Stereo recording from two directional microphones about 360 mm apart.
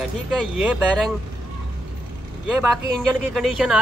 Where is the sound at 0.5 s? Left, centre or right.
Centre.